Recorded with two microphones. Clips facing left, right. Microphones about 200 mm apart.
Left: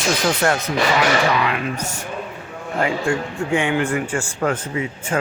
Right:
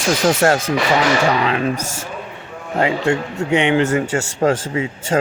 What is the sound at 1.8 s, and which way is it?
Speech, 90° right.